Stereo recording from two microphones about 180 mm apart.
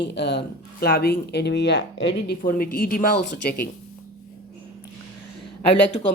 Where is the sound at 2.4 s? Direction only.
50° left (ahead or behind).